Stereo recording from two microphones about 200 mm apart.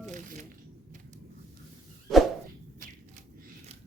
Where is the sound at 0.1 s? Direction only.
40° right (ahead or behind).